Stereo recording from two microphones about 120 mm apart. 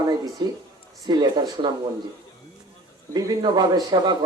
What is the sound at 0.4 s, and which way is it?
Speech, 40° right (ahead or behind).